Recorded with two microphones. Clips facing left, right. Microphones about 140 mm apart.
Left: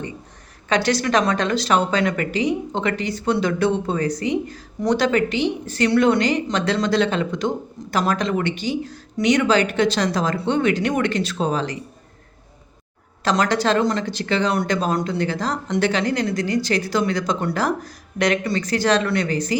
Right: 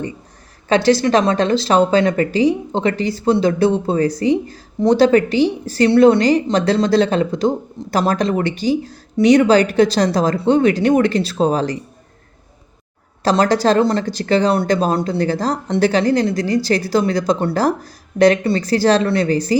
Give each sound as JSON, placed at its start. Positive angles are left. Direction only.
{"t": 0.7, "sound": "speech", "side_deg": -30}
{"t": 13.2, "sound": "speech", "side_deg": -35}